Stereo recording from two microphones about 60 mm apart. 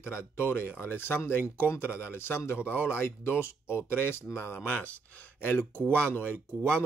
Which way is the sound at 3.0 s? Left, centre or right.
Left.